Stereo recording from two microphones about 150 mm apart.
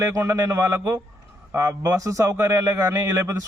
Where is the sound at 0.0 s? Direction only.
20° right (ahead or behind).